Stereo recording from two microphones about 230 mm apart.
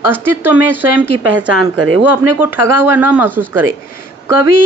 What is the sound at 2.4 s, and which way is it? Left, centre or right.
Speech, centre.